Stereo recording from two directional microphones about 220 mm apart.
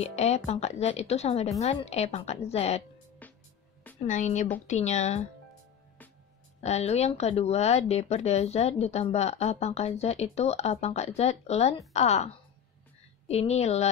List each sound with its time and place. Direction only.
0.0 s speech: 30° left (ahead or behind)
3.2 s music: 5° left (ahead or behind)
4.0 s speech: 30° left (ahead or behind)
6.6 s speech: 30° left (ahead or behind)
13.3 s speech: 30° left (ahead or behind)